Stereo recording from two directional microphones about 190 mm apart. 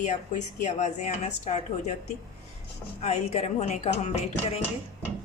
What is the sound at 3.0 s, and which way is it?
A woman's voice, 35° left (ahead or behind).